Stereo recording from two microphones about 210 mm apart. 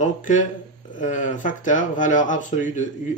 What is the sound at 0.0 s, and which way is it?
Speech, 35° left (ahead or behind).